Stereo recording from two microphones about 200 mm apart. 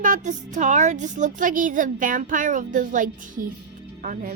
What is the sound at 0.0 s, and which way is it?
A woman's voice, 40° right (ahead or behind).